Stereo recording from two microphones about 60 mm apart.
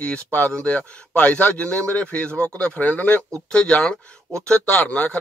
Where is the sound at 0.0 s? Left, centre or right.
Left.